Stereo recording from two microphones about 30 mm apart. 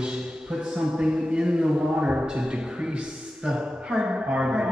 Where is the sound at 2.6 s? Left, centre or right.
Right.